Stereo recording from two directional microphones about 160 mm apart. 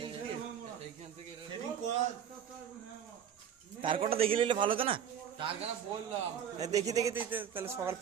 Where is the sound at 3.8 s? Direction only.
35° right (ahead or behind).